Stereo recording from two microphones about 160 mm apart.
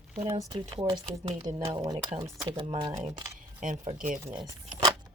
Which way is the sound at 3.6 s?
55° right (ahead or behind).